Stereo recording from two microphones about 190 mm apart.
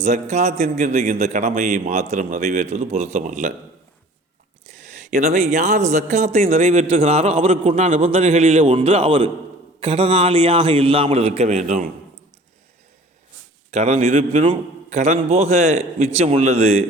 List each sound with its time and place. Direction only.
0.0 s a man's voice: 35° right (ahead or behind)
4.9 s a man's voice: 45° right (ahead or behind)
13.7 s a man's voice: 35° right (ahead or behind)